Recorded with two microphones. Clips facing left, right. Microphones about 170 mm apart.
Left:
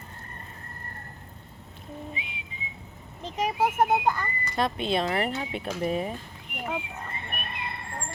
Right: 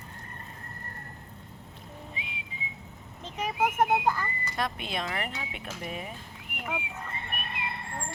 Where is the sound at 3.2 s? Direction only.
30° left (ahead or behind).